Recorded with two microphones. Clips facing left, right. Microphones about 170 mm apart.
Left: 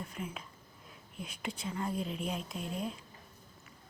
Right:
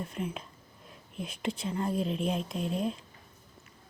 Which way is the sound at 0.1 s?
25° right (ahead or behind).